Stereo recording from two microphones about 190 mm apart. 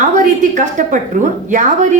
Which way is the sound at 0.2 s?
40° right (ahead or behind).